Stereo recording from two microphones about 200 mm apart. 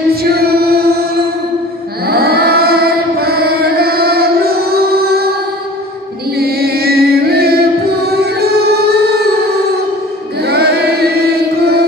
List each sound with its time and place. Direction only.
0.1 s singing: 50° right (ahead or behind)
2.0 s child singing: 50° right (ahead or behind)
6.3 s music: 50° right (ahead or behind)
10.4 s music: 55° right (ahead or behind)